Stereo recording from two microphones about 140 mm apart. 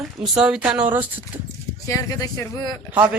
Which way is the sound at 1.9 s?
25° left (ahead or behind).